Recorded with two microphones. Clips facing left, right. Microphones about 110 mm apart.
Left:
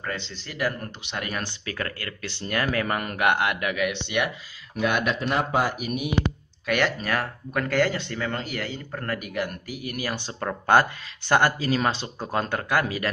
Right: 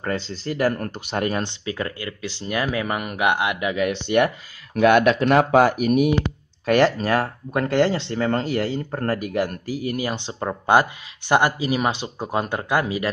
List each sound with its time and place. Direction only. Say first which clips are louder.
0.0 s speech: right 7 dB; 40° right (ahead or behind)
1.3 s speech: right 6 dB; 20° right (ahead or behind)
3.7 s speech: right 6 dB; 40° right (ahead or behind)
4.7 s speech: right 9 dB; 65° right (ahead or behind); by 5.7 s 80° right
5.7 s speech: right 10 dB; 55° right (ahead or behind)
6.6 s speech: right 7 dB; 35° right (ahead or behind); by 13.1 s 20° right (ahead or behind)